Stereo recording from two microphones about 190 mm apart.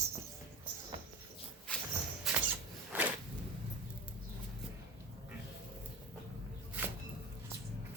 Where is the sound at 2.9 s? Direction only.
10° right (ahead or behind).